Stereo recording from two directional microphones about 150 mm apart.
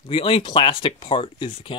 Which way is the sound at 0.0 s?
35° left (ahead or behind).